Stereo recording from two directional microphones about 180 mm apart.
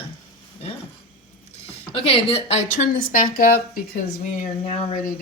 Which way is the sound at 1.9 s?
35° left (ahead or behind).